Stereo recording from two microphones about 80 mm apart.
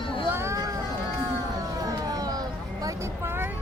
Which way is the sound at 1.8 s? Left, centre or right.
Right.